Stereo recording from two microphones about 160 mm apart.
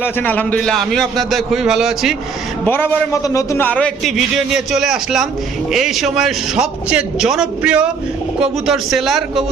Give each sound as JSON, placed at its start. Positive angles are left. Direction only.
{"t": 0.0, "sound": "a man's voice", "side_deg": 10}
{"t": 2.6, "sound": "a man's voice", "side_deg": 15}